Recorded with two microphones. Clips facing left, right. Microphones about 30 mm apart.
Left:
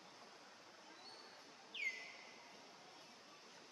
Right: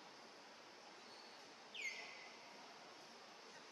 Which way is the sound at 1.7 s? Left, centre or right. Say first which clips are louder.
Left 4 dB; left.